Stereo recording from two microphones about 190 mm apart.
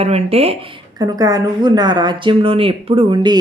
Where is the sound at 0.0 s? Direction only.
30° right (ahead or behind).